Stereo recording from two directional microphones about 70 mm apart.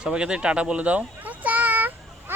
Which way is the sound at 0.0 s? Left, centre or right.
Centre.